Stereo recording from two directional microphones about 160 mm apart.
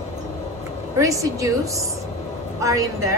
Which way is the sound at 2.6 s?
20° right (ahead or behind).